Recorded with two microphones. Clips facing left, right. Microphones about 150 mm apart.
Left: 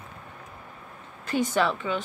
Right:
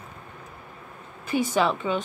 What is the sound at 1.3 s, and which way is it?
Speech, 10° right (ahead or behind).